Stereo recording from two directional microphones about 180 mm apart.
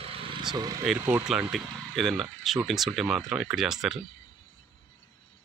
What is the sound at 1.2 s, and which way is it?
Speech, 5° right (ahead or behind).